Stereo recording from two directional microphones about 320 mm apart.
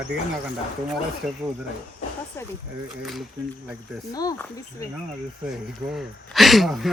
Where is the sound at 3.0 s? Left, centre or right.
Centre.